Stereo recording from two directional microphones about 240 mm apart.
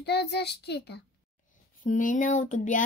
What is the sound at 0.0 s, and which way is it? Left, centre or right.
A child's voice, left.